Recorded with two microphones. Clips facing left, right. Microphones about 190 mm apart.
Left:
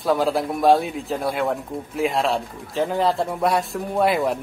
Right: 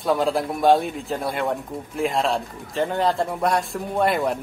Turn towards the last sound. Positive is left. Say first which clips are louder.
# left 1 dB
turn(degrees=0)  # may be behind; listen again after turning